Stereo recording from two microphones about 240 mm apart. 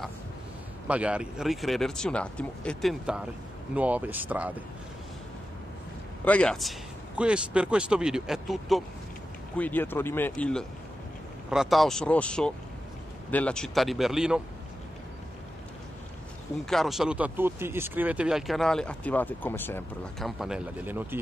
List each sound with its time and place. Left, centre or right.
0.8 s speech: centre
6.2 s speech: centre
16.6 s speech: centre